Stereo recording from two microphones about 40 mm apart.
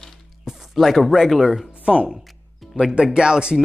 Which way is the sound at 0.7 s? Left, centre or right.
Centre.